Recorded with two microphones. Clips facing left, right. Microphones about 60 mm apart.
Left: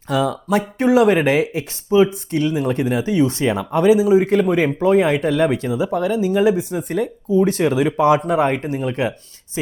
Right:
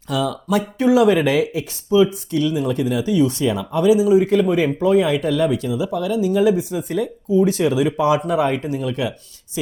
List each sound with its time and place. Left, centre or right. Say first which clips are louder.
0.1 s speech: left 2 dB; left